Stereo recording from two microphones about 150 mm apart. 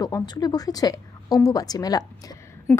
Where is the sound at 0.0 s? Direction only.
25° left (ahead or behind).